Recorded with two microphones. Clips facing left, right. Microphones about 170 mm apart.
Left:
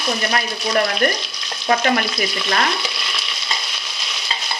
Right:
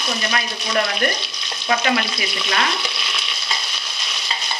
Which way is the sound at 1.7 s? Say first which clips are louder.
Left 2 dB; 45° left (ahead or behind).